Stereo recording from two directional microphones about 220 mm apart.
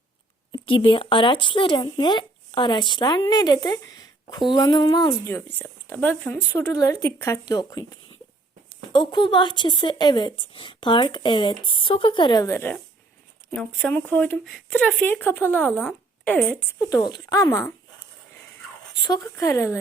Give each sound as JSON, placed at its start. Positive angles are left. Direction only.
{"t": 0.5, "sound": "a woman's voice", "side_deg": 20}
{"t": 5.2, "sound": "a woman's voice", "side_deg": 10}
{"t": 19.0, "sound": "speech", "side_deg": 15}